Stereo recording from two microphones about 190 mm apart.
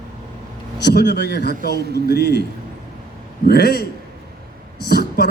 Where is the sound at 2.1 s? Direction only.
60° left (ahead or behind).